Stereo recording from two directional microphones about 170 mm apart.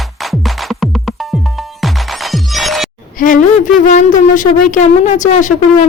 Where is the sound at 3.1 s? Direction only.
50° left (ahead or behind).